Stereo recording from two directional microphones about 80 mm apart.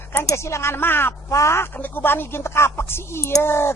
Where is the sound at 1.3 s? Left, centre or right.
Left.